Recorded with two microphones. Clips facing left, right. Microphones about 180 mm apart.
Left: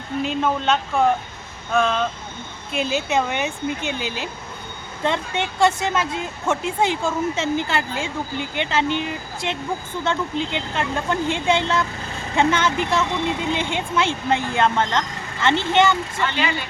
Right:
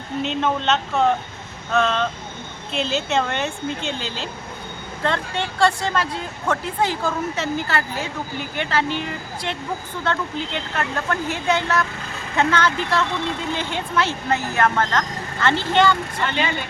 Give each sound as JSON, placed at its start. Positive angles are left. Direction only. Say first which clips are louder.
{"t": 0.2, "sound": "a woman's voice", "louder": "even", "side_deg": 5}